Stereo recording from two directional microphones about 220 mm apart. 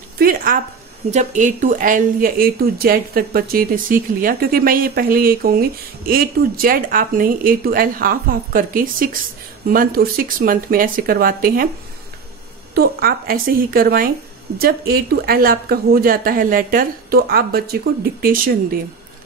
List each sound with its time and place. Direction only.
0.2 s a sound: 40° right (ahead or behind)
1.1 s speech: 35° right (ahead or behind)
12.7 s speech: 40° right (ahead or behind)